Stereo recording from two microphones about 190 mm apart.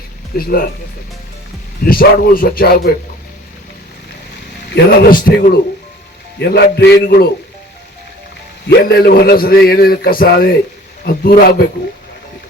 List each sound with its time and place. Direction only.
0.3 s a man's voice: 50° left (ahead or behind)
1.8 s a man's voice: 50° left (ahead or behind)
4.7 s a man's voice: 50° left (ahead or behind)
6.4 s a man's voice: 60° left (ahead or behind)
8.8 s a man's voice: 55° left (ahead or behind)